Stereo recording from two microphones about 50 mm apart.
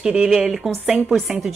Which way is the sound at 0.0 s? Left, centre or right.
Centre.